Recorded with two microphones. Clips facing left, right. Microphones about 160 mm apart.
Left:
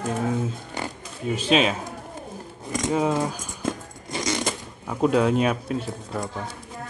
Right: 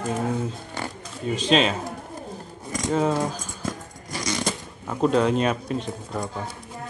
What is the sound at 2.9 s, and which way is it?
Speech, 5° left (ahead or behind).